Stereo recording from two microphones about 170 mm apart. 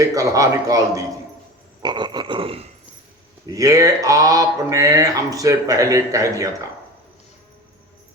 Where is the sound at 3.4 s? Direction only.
20° right (ahead or behind).